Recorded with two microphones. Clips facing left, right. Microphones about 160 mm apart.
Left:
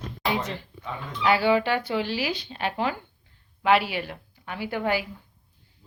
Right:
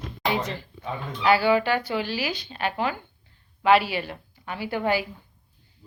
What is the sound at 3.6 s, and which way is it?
Speech, 15° left (ahead or behind).